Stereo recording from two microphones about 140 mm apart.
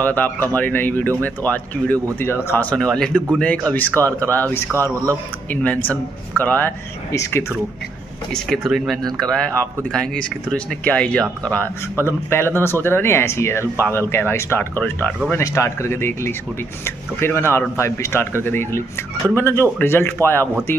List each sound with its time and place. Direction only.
0.0 s speech: 10° left (ahead or behind)
8.3 s speech: centre (ahead or behind)